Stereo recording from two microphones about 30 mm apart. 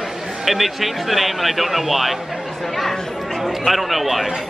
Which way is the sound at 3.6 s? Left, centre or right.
Centre.